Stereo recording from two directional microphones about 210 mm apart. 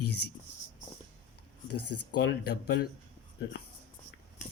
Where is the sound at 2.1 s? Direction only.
55° left (ahead or behind).